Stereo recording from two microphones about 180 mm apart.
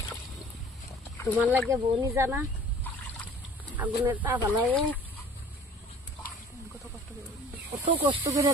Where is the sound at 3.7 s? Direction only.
10° right (ahead or behind).